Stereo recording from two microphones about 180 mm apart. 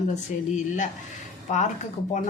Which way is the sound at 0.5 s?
45° left (ahead or behind).